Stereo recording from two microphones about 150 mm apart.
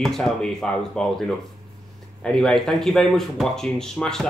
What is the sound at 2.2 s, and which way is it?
Speech, 5° left (ahead or behind).